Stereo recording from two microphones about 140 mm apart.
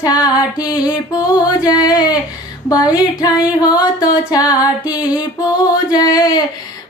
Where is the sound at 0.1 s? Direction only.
10° right (ahead or behind).